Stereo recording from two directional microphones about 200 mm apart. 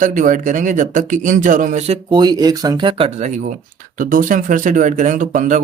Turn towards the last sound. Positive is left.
turn(degrees=-40)  # may be behind; listen again after turning